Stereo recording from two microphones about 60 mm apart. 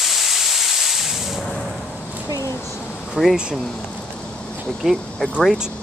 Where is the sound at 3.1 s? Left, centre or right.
Centre.